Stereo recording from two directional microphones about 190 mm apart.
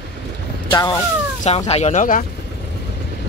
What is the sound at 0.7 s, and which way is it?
Speech, 20° left (ahead or behind).